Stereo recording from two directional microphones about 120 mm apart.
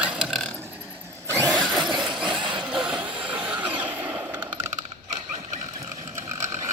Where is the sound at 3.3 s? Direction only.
10° right (ahead or behind).